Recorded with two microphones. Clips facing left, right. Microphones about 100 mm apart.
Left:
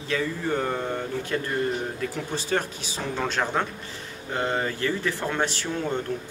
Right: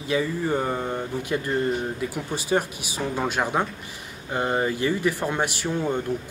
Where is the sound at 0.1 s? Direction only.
15° right (ahead or behind).